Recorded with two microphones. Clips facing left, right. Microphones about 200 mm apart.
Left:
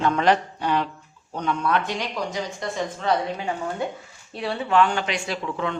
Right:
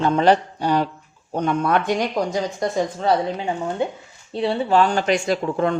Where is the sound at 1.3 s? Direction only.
50° right (ahead or behind).